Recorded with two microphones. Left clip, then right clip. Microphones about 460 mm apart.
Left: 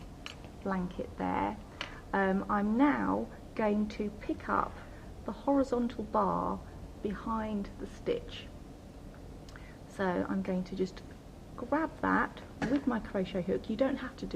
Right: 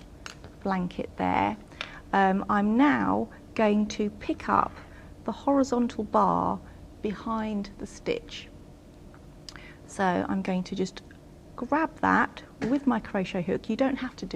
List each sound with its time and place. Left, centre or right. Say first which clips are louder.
0.6 s a woman's voice: right 6 dB; right
10.0 s a woman's voice: right 6 dB; right